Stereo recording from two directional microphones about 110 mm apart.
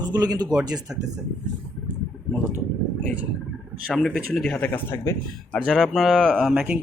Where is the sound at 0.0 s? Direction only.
40° right (ahead or behind).